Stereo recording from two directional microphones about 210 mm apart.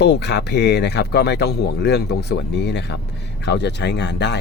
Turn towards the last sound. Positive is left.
turn(degrees=55)  # may be behind; listen again after turning